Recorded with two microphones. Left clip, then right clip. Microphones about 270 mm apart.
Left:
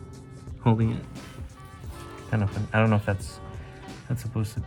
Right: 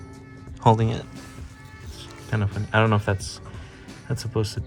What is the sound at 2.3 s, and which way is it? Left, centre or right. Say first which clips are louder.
Speech: right 4 dB; centre.